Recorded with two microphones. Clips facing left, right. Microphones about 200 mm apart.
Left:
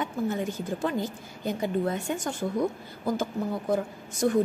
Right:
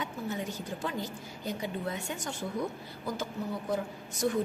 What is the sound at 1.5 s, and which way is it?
Speech, 50° left (ahead or behind).